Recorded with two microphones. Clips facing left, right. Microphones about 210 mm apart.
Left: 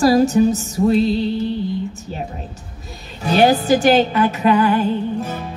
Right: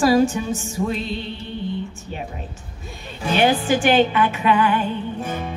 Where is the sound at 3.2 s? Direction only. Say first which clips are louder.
Left 4 dB; 40° left (ahead or behind).